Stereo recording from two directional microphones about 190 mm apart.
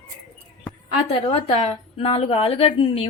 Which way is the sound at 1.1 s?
30° left (ahead or behind).